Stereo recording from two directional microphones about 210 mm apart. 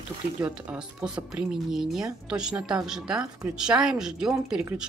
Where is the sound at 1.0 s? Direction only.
5° right (ahead or behind).